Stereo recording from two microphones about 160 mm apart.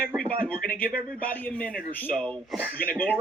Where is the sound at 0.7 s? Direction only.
10° left (ahead or behind).